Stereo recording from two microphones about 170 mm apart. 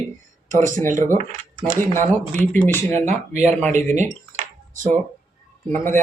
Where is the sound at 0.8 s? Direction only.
45° right (ahead or behind).